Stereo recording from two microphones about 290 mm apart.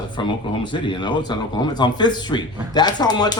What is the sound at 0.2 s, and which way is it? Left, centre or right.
Speech, centre.